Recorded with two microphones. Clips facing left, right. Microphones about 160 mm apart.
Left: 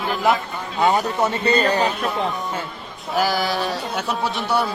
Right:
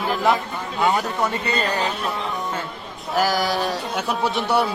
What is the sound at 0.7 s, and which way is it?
Speech, 20° left (ahead or behind).